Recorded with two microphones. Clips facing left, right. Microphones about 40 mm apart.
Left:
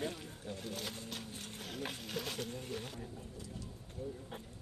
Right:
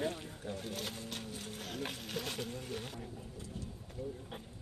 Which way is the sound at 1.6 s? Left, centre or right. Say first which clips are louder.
Even; centre.